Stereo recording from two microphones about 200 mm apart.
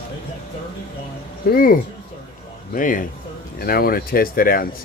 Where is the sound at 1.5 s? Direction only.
45° left (ahead or behind).